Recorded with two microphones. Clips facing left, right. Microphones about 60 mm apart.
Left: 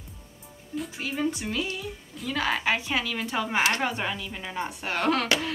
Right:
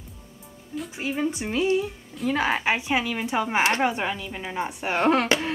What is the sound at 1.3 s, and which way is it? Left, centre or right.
Speech, right.